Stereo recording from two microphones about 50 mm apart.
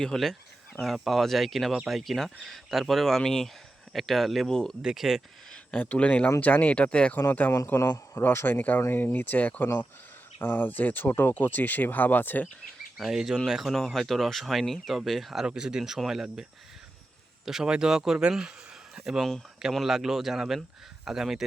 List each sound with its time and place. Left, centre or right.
0.0 s speech: centre
4.8 s speech: centre
6.0 s speech: left
7.8 s speech: left
8.2 s speech: left
8.5 s speech: left
13.0 s speech: centre
15.4 s speech: centre